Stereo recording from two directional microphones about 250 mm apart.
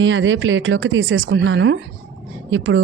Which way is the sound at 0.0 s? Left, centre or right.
Right.